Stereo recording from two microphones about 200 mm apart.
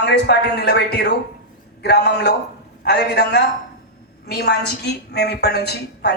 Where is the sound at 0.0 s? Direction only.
55° left (ahead or behind).